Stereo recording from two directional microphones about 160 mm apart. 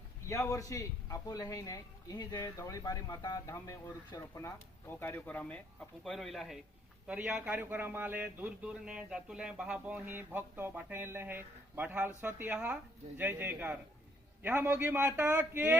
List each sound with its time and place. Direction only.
0.3 s a man's voice: 20° left (ahead or behind); by 15.8 s 10° right (ahead or behind)